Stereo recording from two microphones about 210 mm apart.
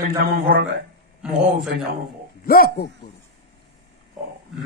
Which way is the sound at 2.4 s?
45° left (ahead or behind).